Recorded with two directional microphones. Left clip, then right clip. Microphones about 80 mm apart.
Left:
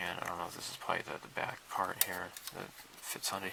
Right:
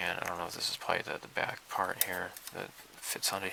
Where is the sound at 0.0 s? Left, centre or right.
Right.